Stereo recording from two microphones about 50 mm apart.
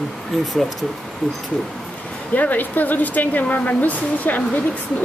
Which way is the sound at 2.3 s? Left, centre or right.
Left.